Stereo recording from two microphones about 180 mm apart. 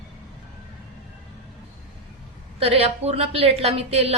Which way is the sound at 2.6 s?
35° right (ahead or behind).